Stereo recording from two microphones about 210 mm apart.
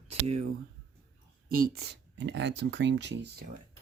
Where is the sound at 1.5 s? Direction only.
45° right (ahead or behind).